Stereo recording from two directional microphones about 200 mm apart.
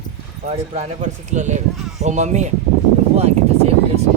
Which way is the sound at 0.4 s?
35° right (ahead or behind).